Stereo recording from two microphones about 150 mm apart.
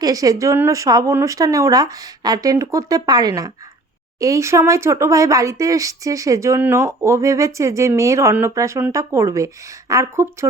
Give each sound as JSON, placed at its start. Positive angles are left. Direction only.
{"t": 0.0, "sound": "speech", "side_deg": -25}